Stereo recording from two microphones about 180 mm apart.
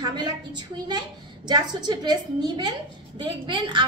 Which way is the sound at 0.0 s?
25° right (ahead or behind).